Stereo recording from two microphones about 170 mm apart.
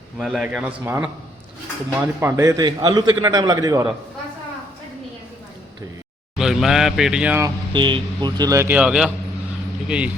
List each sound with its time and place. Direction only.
0.2 s a man's voice: centre (ahead or behind)
2.2 s speech: 15° right (ahead or behind)
6.3 s a man's voice: centre (ahead or behind)
7.4 s a man's voice: 30° right (ahead or behind); by 10.1 s 5° right (ahead or behind)